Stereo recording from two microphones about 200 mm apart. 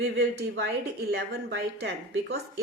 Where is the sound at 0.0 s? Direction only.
55° right (ahead or behind).